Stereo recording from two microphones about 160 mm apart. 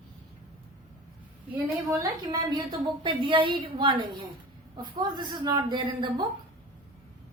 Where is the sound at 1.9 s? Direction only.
25° right (ahead or behind).